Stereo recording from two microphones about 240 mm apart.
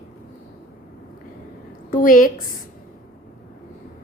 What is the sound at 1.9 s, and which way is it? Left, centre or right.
Speech, left.